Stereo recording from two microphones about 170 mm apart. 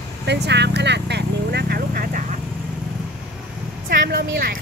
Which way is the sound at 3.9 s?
65° right (ahead or behind).